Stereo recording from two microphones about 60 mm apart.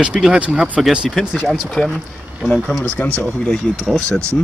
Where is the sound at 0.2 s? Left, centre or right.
Centre.